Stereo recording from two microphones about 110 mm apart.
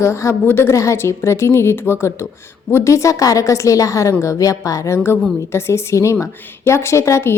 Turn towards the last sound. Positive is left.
turn(degrees=25)  # may be behind; listen again after turning